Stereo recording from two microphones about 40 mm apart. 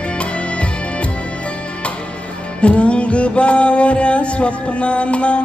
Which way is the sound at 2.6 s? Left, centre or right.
Left.